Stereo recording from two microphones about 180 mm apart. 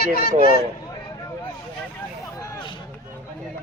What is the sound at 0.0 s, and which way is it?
Speech, 55° left (ahead or behind).